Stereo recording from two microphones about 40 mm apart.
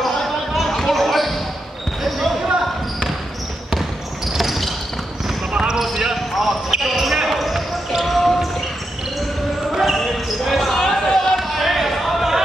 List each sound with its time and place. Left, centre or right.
0.6 s basketball bounce: centre
4.3 s cricket: centre
5.5 s basketball bounce: right
5.9 s basketball bounce: centre
9.7 s basketball bounce: centre
10.8 s a sound: centre
11.3 s basketball bounce: centre